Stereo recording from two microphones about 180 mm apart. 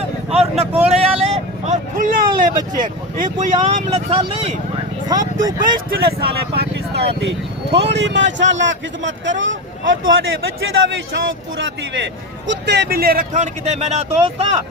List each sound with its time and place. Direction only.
0.3 s vehicle: 35° right (ahead or behind)
3.2 s a man's voice: 45° right (ahead or behind); by 5.6 s 20° right (ahead or behind)
5.9 s speech: 60° right (ahead or behind)
7.2 s a man's voice: 75° right (ahead or behind); by 14.6 s 35° right (ahead or behind)